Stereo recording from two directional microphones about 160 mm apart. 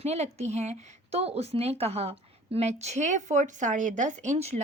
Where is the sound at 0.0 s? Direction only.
45° right (ahead or behind).